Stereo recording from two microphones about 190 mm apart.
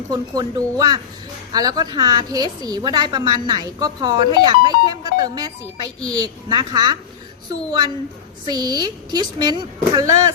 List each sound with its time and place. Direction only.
0.1 s a woman's voice: 20° right (ahead or behind)